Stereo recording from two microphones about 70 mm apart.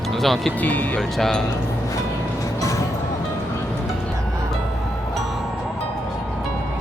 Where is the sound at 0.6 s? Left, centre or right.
Left.